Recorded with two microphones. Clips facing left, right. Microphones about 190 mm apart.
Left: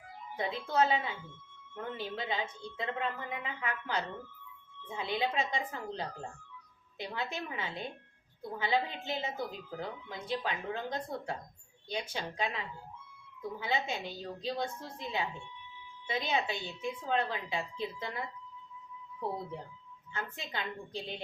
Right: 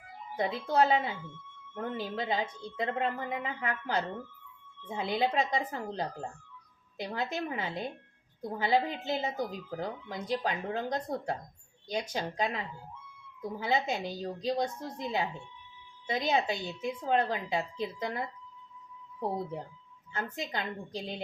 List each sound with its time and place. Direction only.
0.3 s a woman's voice: 40° right (ahead or behind)
20.1 s a woman's voice: 40° right (ahead or behind)